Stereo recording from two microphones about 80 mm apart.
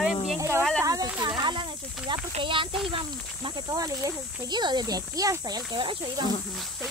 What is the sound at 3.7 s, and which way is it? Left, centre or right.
Speech, right.